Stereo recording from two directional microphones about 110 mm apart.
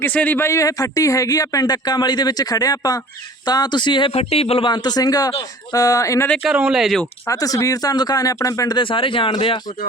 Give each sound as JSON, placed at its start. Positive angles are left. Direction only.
{"t": 0.0, "sound": "a man's voice", "side_deg": 15}
{"t": 4.1, "sound": "speech", "side_deg": 65}
{"t": 4.7, "sound": "a man's voice", "side_deg": 40}
{"t": 6.4, "sound": "speech", "side_deg": -10}
{"t": 7.3, "sound": "a man's voice", "side_deg": 35}
{"t": 8.8, "sound": "speech", "side_deg": 50}